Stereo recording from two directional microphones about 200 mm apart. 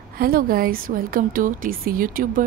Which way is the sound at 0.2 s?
45° right (ahead or behind).